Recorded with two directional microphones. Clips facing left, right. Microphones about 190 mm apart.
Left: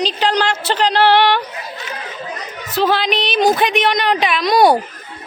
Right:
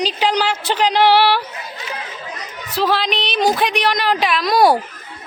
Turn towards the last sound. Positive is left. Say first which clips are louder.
# left 2 dB
turn(degrees=0)  # may be behind; listen again after turning